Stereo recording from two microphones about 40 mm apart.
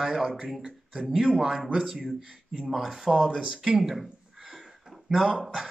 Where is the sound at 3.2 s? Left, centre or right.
Centre.